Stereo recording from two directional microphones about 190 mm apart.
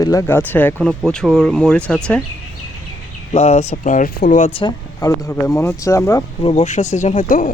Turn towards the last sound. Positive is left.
turn(degrees=45)  # may be behind; listen again after turning